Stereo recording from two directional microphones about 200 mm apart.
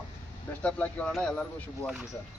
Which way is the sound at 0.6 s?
5° left (ahead or behind).